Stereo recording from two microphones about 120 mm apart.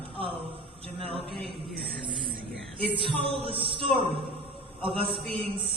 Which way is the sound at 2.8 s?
50° right (ahead or behind).